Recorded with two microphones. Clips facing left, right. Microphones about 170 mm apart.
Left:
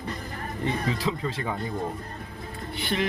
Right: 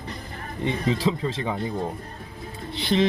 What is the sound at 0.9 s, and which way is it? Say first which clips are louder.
Speech: right 4 dB; 25° right (ahead or behind).